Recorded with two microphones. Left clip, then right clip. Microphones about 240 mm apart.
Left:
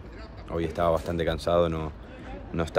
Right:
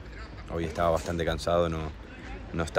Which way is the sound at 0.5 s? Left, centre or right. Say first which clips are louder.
Left 2 dB; centre.